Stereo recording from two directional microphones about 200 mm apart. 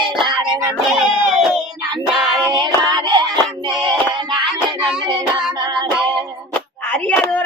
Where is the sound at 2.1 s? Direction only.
Centre (ahead or behind).